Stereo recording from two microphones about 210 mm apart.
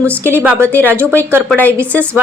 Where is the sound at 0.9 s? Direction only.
10° right (ahead or behind).